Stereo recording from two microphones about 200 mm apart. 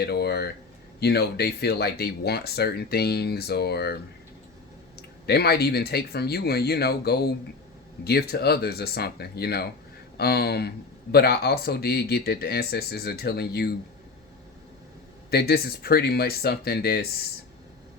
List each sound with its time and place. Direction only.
0.0 s a sound: 55° left (ahead or behind)
0.9 s speech: 55° left (ahead or behind)
15.3 s speech: 50° left (ahead or behind)